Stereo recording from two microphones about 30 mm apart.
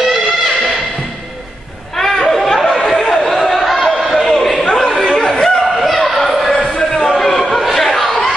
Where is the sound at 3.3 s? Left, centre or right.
Centre.